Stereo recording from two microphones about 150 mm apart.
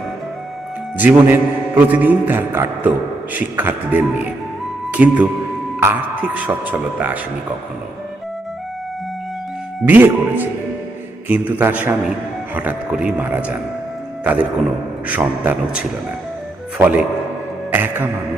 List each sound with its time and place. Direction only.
0.9 s a man's voice: 10° right (ahead or behind)
9.8 s a man's voice: 10° right (ahead or behind)
15.0 s a man's voice: 10° right (ahead or behind)
17.7 s music: 15° right (ahead or behind)